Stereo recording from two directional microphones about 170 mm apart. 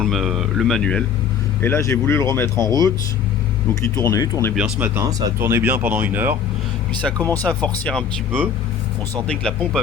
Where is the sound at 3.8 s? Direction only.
15° left (ahead or behind).